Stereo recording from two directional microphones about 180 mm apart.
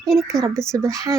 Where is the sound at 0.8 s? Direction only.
20° right (ahead or behind).